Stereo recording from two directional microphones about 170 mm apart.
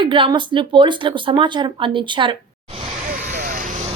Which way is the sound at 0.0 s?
30° right (ahead or behind).